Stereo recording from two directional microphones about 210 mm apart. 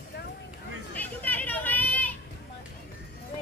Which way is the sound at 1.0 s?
10° left (ahead or behind).